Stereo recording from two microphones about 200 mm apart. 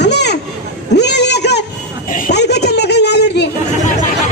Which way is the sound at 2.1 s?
50° left (ahead or behind).